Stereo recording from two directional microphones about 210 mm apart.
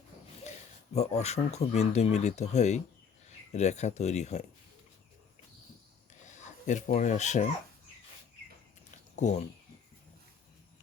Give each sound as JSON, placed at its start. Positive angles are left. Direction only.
{"t": 1.1, "sound": "speech", "side_deg": 30}
{"t": 6.2, "sound": "speech", "side_deg": 35}
{"t": 9.1, "sound": "speech", "side_deg": 35}